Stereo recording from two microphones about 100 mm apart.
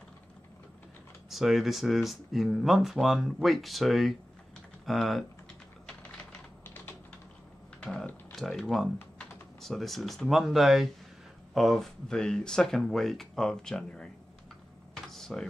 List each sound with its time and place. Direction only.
1.3 s speech: centre (ahead or behind)
5.9 s typing: 10° left (ahead or behind)
6.6 s typing: 20° left (ahead or behind)
7.8 s typing: 5° left (ahead or behind)
8.3 s speech: 5° left (ahead or behind)
15.1 s a sound: 5° left (ahead or behind)